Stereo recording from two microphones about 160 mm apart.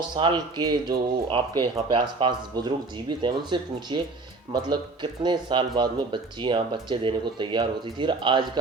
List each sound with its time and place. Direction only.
0.2 s speech: 30° right (ahead or behind)
5.2 s speech: 30° right (ahead or behind)